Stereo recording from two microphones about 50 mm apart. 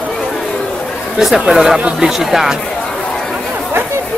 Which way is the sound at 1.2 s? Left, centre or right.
Centre.